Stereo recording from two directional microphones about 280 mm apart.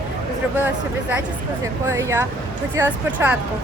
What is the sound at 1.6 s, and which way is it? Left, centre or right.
A woman's voice, centre.